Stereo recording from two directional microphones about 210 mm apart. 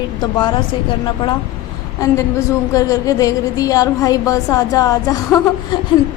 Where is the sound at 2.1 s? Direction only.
15° left (ahead or behind).